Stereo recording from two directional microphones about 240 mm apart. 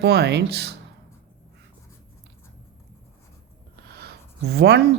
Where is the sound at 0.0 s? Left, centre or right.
Right.